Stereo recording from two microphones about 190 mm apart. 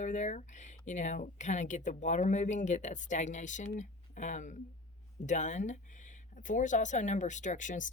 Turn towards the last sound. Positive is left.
turn(degrees=40)  # may be behind; listen again after turning